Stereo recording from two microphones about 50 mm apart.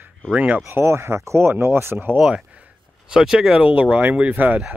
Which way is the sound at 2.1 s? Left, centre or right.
Centre.